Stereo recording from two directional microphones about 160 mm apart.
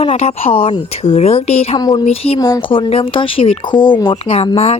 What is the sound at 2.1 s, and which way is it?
Speech, 40° left (ahead or behind).